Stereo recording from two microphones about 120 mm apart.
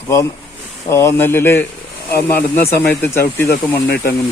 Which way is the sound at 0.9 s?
20° left (ahead or behind).